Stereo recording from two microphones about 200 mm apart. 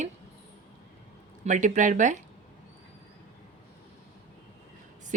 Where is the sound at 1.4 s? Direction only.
40° right (ahead or behind).